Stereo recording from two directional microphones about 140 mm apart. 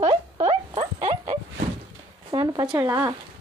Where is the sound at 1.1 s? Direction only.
55° right (ahead or behind).